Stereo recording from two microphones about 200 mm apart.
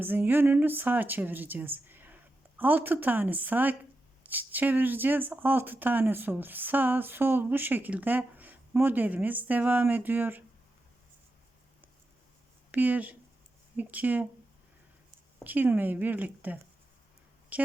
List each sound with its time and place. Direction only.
0.0 s speech: 10° right (ahead or behind)
12.7 s speech: 10° right (ahead or behind)
15.4 s speech: 10° right (ahead or behind)
17.5 s a sound: 10° right (ahead or behind)